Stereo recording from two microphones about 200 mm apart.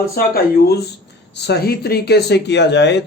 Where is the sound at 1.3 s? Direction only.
60° left (ahead or behind).